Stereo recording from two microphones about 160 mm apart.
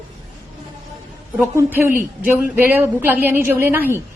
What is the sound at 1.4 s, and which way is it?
A woman's voice, 15° right (ahead or behind).